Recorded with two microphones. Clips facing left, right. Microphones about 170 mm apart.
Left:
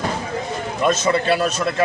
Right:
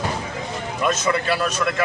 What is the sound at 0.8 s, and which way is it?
A man's voice, 30° left (ahead or behind).